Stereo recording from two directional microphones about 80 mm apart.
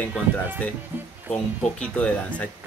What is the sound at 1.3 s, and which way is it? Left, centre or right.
Speech, centre.